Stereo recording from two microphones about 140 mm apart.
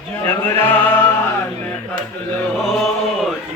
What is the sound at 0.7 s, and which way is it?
Music, 15° left (ahead or behind).